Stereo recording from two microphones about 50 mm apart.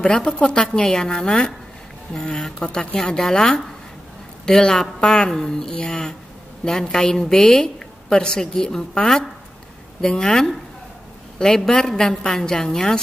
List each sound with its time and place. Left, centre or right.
0.0 s a woman's voice: centre